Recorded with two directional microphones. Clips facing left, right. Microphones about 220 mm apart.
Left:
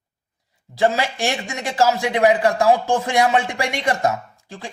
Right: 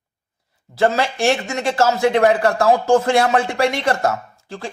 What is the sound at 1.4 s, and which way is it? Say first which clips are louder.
Speech: right 2 dB; 15° left (ahead or behind).